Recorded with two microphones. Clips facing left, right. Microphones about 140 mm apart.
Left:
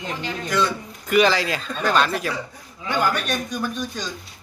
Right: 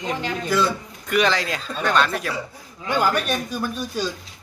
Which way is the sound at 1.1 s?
Centre (ahead or behind).